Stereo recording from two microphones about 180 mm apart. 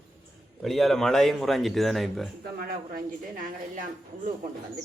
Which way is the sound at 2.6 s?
55° right (ahead or behind).